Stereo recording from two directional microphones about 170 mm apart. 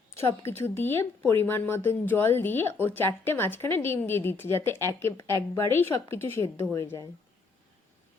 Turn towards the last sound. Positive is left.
turn(degrees=15)  # may be behind; listen again after turning